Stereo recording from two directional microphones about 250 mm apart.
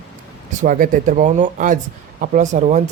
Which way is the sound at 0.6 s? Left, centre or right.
Right.